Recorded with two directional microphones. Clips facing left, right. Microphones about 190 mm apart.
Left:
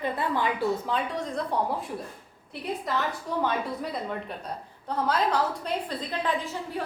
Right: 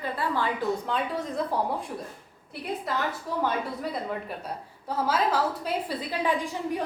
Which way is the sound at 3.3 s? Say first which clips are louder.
Left 2 dB; centre (ahead or behind).